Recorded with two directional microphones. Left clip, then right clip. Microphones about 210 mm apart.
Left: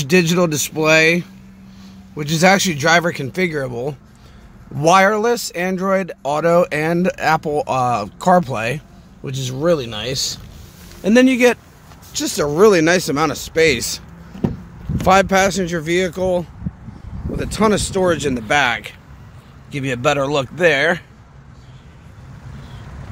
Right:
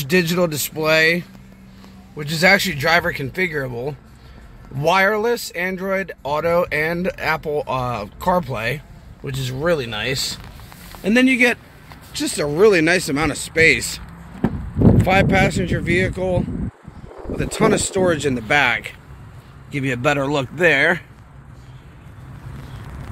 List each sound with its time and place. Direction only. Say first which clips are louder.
0.0 s speech: left 3 dB; 15° left (ahead or behind)
15.0 s speech: left 7 dB; 25° left (ahead or behind); by 21.0 s 10° left (ahead or behind)